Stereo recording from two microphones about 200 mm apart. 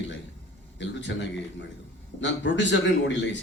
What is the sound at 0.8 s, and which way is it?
A man's voice, 65° left (ahead or behind).